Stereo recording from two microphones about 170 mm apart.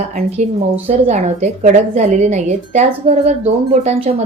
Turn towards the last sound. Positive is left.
turn(degrees=-40)  # may be behind; listen again after turning